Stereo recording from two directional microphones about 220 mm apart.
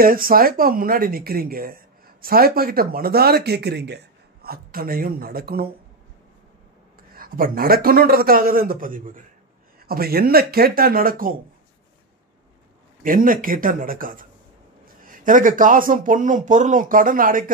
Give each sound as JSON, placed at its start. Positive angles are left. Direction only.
{"t": 0.0, "sound": "speech", "side_deg": -40}
{"t": 7.2, "sound": "speech", "side_deg": -40}
{"t": 13.0, "sound": "speech", "side_deg": -40}